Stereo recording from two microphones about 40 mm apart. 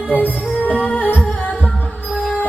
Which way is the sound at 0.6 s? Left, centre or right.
Left.